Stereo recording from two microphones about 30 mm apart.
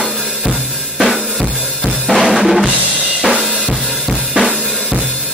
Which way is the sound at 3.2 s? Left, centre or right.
Centre.